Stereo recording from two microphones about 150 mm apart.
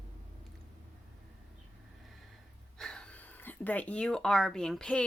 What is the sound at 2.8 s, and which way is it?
Speech, 5° left (ahead or behind).